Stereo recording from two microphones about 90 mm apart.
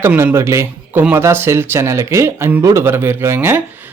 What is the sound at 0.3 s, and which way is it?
A man's voice, 30° right (ahead or behind).